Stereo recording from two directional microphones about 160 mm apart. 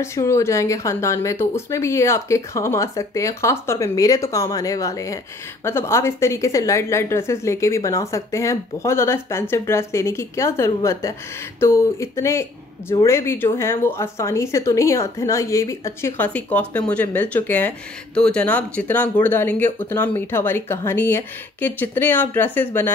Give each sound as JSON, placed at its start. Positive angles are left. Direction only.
{"t": 0.0, "sound": "speech", "side_deg": 20}